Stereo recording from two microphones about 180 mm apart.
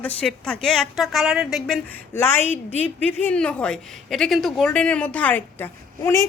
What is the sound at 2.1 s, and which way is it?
A woman's voice, 15° left (ahead or behind).